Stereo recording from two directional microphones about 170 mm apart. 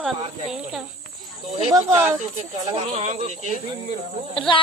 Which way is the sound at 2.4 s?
40° right (ahead or behind).